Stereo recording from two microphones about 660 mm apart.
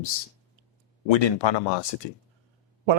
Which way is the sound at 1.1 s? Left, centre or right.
Left.